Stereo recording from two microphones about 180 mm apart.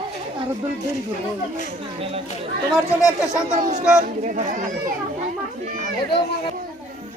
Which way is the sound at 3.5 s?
45° right (ahead or behind).